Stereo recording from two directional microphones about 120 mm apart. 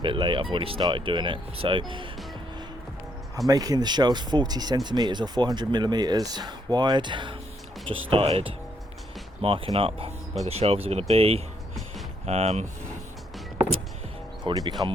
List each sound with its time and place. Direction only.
0.0 s speech: 45° right (ahead or behind)
3.3 s speech: 30° right (ahead or behind); by 12.6 s 65° right (ahead or behind)
14.4 s speech: 35° right (ahead or behind)